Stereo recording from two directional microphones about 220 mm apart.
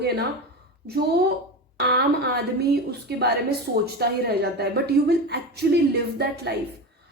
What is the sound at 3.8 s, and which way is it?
A woman's voice, 45° right (ahead or behind).